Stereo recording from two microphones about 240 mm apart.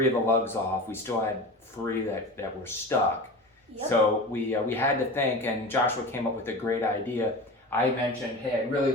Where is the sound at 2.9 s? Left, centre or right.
Centre.